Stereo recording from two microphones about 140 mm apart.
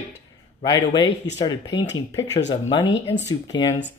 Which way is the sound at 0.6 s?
35° left (ahead or behind).